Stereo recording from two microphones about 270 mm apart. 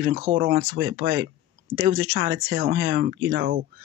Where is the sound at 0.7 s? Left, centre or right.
Right.